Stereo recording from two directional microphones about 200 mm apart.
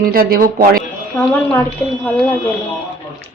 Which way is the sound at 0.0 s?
50° right (ahead or behind).